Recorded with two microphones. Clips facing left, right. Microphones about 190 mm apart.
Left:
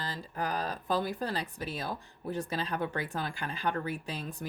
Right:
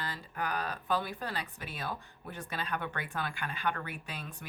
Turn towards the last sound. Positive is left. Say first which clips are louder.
# left 6 dB
turn(degrees=35)  # may be behind; listen again after turning